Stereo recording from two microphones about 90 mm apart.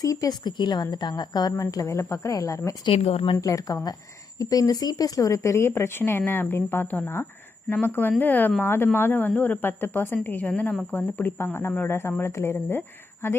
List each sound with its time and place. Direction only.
0.0 s a woman's voice: 40° left (ahead or behind)
2.8 s speech: 90° left
3.4 s speech: 40° left (ahead or behind); by 10.2 s 25° left (ahead or behind)
10.4 s a woman's voice: 10° left (ahead or behind)
10.9 s speech: 20° left (ahead or behind)